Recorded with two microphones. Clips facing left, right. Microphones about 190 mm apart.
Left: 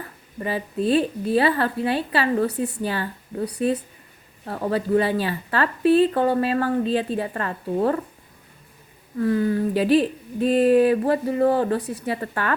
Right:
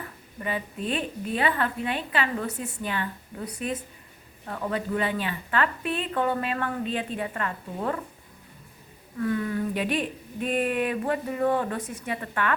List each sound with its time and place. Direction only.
0.4 s speech: 35° left (ahead or behind)
4.4 s speech: 35° left (ahead or behind)
9.1 s speech: 35° left (ahead or behind)